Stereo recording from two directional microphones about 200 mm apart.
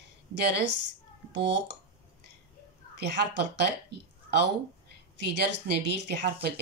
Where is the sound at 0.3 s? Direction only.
60° right (ahead or behind).